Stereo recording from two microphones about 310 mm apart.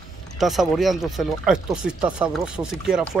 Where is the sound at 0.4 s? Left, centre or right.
Centre.